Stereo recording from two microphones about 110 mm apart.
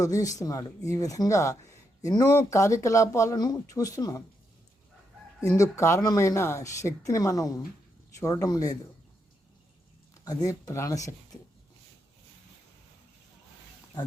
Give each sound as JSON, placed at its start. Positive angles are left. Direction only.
{"t": 0.0, "sound": "speech", "side_deg": 30}
{"t": 5.4, "sound": "speech", "side_deg": 30}
{"t": 10.2, "sound": "speech", "side_deg": 30}